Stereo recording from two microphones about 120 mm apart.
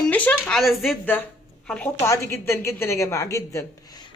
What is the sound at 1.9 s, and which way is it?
Speech, 25° left (ahead or behind).